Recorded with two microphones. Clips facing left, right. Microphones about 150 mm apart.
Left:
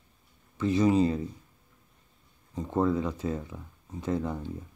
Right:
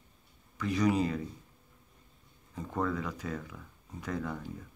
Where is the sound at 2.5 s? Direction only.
25° left (ahead or behind).